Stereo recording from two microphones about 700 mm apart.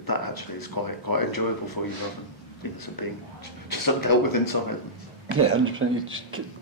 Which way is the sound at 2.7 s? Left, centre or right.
Left.